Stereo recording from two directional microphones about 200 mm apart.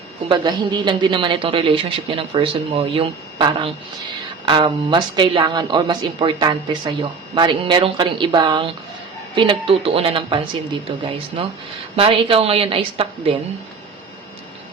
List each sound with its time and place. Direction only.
0.3 s speech: 20° right (ahead or behind)